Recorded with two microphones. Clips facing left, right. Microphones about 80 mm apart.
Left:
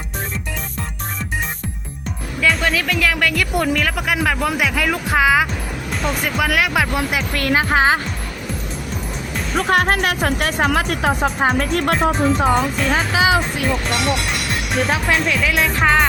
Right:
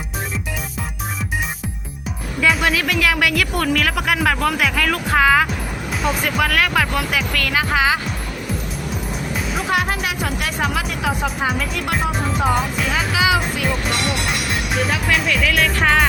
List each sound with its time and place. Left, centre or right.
2.4 s speech: centre
3.5 s speech: centre
5.9 s speech: centre
6.9 s speech: left
9.3 s music: centre
9.6 s speech: left
12.5 s speech: centre
12.9 s speech: left
14.8 s speech: left
15.1 s speech: centre